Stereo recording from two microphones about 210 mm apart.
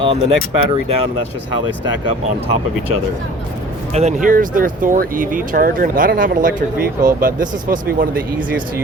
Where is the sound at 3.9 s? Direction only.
30° right (ahead or behind).